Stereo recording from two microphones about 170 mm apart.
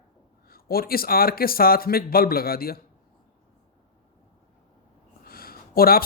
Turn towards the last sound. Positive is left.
turn(degrees=60)  # may be behind; listen again after turning